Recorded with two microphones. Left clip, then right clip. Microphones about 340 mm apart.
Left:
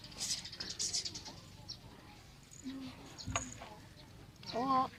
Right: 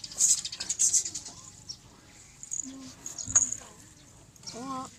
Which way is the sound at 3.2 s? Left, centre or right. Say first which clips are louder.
Right 12 dB; centre.